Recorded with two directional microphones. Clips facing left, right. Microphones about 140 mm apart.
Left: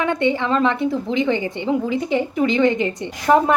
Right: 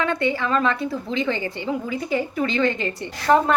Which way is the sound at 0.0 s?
20° left (ahead or behind).